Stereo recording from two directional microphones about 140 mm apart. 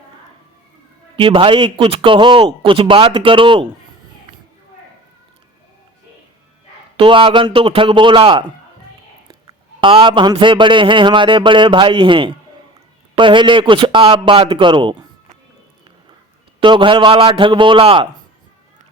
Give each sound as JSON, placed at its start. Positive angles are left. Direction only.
{"t": 1.1, "sound": "speech", "side_deg": -40}
{"t": 6.9, "sound": "a man's voice", "side_deg": -40}
{"t": 16.6, "sound": "speech", "side_deg": -35}